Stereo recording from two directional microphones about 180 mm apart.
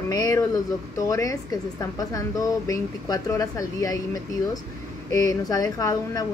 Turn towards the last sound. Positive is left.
turn(degrees=20)  # may be behind; listen again after turning